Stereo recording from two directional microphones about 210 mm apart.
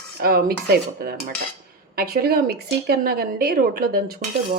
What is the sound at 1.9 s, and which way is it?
Speech, 45° right (ahead or behind).